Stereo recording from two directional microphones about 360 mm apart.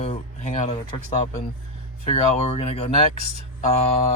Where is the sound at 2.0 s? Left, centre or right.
Centre.